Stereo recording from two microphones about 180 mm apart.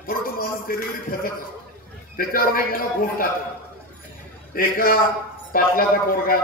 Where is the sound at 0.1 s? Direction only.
55° left (ahead or behind).